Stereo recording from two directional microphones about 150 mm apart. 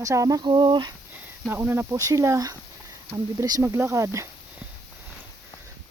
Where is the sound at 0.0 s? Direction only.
20° right (ahead or behind).